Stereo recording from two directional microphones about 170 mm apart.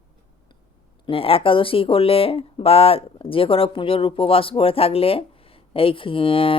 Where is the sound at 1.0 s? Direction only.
35° left (ahead or behind).